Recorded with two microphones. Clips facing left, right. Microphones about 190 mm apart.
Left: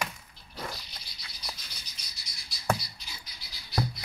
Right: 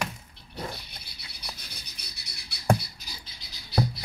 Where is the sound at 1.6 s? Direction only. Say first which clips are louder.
Right 4 dB; 60° right (ahead or behind).